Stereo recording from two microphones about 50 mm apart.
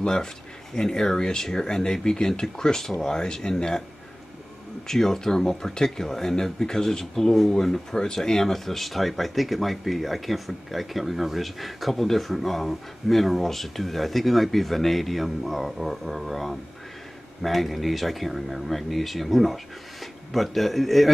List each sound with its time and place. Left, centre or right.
0.0 s speech: centre
4.8 s speech: centre